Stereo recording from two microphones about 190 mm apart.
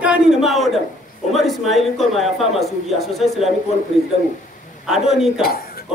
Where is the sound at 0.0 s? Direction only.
5° right (ahead or behind).